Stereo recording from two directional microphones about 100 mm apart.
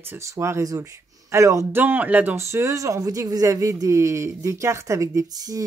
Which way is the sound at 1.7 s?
20° right (ahead or behind).